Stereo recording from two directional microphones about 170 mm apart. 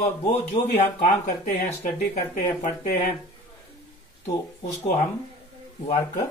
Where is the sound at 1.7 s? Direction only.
45° left (ahead or behind).